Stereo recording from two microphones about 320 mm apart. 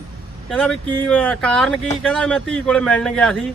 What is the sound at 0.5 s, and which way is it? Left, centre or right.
Speech, centre.